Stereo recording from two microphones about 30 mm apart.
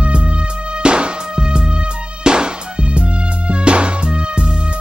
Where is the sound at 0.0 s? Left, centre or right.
Right.